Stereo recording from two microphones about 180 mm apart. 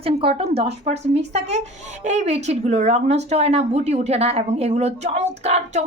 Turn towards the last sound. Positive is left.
turn(degrees=-35)  # may be behind; listen again after turning